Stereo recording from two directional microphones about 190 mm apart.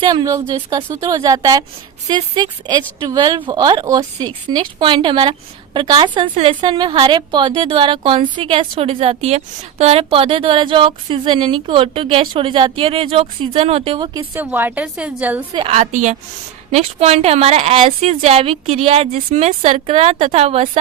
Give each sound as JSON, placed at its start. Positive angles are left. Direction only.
{"t": 0.1, "sound": "a woman's voice", "side_deg": -20}
{"t": 14.3, "sound": "a woman's voice", "side_deg": -10}
{"t": 15.5, "sound": "a woman's voice", "side_deg": -30}